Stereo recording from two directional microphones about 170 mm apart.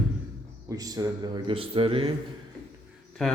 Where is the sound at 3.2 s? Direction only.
5° left (ahead or behind).